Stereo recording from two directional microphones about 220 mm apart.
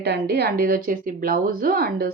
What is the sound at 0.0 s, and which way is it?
Speech, 50° right (ahead or behind).